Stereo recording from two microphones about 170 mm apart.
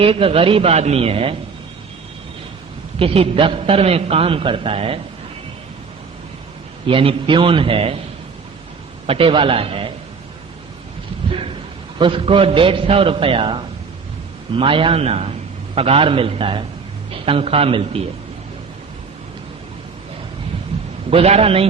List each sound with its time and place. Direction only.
0.0 s a man's voice: 35° right (ahead or behind)
3.0 s a man's voice: 35° right (ahead or behind)
6.8 s a man's voice: 30° right (ahead or behind)
9.0 s a man's voice: 35° right (ahead or behind)
11.9 s a man's voice: 30° right (ahead or behind)
21.1 s a man's voice: 35° right (ahead or behind)